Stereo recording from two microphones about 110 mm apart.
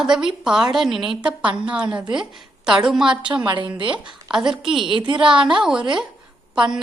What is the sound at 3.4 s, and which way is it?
Speech, 50° right (ahead or behind).